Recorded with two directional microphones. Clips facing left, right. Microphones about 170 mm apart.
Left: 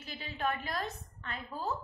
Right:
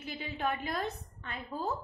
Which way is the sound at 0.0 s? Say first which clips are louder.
Right 1 dB; 20° right (ahead or behind).